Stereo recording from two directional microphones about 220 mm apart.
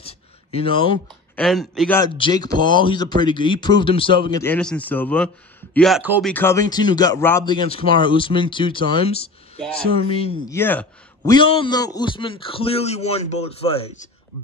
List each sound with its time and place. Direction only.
0.0 s a sound: 25° left (ahead or behind)
1.3 s speech: centre (ahead or behind)
2.0 s speech: 20° left (ahead or behind)
4.4 s speech: 5° left (ahead or behind)
6.2 s speech: 10° left (ahead or behind); by 10.3 s 25° left (ahead or behind)
10.5 s a man's voice: 10° left (ahead or behind)
11.3 s speech: 20° left (ahead or behind)